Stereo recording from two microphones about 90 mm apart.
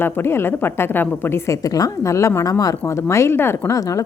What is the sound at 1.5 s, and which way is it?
A woman's voice, 40° left (ahead or behind).